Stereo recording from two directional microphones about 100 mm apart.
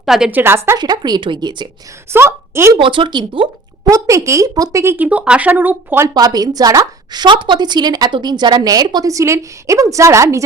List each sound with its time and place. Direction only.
0.0 s a woman's voice: 5° right (ahead or behind)
0.3 s a woman's voice: 20° right (ahead or behind)
0.8 s a woman's voice: 45° right (ahead or behind)
2.1 s a woman's voice: 25° right (ahead or behind)
2.7 s speech: 55° right (ahead or behind)
3.8 s a woman's voice: 35° right (ahead or behind)
5.0 s speech: 15° right (ahead or behind)
6.1 s a woman's voice: 40° right (ahead or behind)